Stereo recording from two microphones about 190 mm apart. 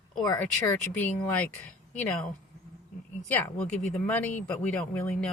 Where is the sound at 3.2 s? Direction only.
10° left (ahead or behind).